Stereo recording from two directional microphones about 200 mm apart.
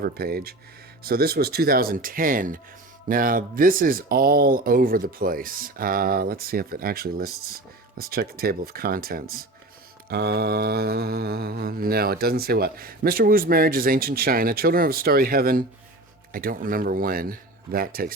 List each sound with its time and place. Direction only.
0.0 s speech: 50° right (ahead or behind)